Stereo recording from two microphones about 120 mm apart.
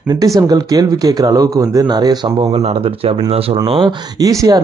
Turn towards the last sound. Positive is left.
turn(degrees=-30)  # may be behind; listen again after turning